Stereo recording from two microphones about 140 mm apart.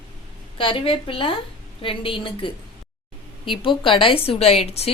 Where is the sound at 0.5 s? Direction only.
40° left (ahead or behind).